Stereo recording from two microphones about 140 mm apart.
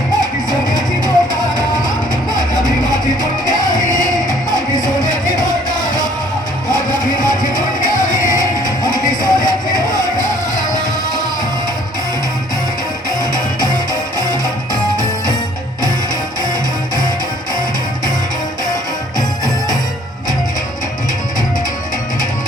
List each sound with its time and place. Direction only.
0.7 s music: 30° left (ahead or behind)
3.4 s music: 30° left (ahead or behind)
3.8 s music: 70° left (ahead or behind)
5.0 s music: 70° left (ahead or behind)
8.3 s music: 30° left (ahead or behind)
13.1 s music: 30° left (ahead or behind)